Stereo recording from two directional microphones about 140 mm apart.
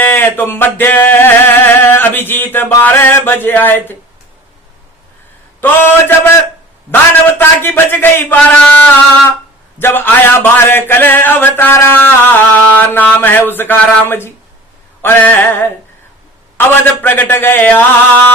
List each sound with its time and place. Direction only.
0.0 s a sound: 15° left (ahead or behind)
5.5 s a man's voice: 15° left (ahead or behind)
7.3 s a man's voice: 15° left (ahead or behind)